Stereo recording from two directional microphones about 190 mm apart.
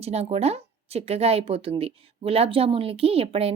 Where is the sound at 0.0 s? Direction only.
35° right (ahead or behind).